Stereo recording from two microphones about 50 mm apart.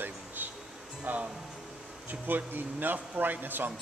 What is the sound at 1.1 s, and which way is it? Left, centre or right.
Speech, right.